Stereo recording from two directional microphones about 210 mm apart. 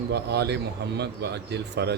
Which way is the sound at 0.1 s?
50° right (ahead or behind).